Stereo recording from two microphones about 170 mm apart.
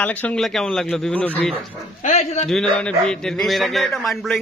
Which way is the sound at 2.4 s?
5° left (ahead or behind).